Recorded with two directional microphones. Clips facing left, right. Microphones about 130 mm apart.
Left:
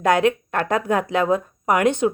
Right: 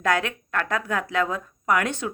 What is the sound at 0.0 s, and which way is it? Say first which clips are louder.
A woman's voice: left 7 dB; 20° left (ahead or behind).